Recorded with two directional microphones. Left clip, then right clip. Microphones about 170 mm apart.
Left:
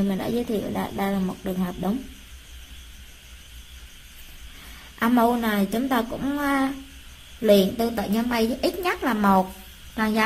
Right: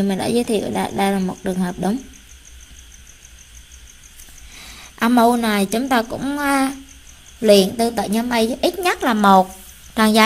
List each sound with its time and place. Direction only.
0.1 s speech: 30° right (ahead or behind)
4.9 s a woman's voice: 35° right (ahead or behind)